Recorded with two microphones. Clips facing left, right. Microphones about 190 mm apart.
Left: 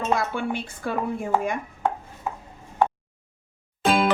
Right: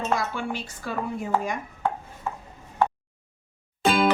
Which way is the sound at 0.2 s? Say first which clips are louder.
Left 3 dB; 55° left (ahead or behind).